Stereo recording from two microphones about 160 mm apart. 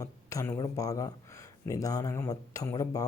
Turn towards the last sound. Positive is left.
turn(degrees=20)  # may be behind; listen again after turning